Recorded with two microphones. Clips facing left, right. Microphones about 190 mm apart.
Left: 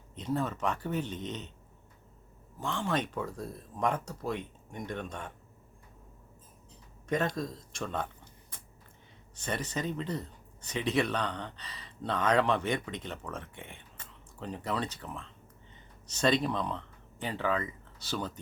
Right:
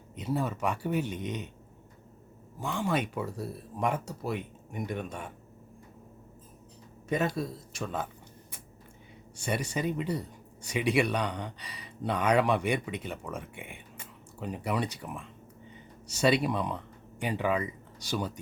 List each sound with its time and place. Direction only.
0.2 s speech: 10° right (ahead or behind)
2.6 s speech: 10° right (ahead or behind)
7.1 s speech: 10° right (ahead or behind)